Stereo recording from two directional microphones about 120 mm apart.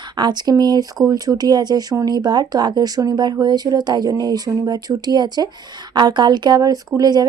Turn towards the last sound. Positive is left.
turn(degrees=-35)  # may be behind; listen again after turning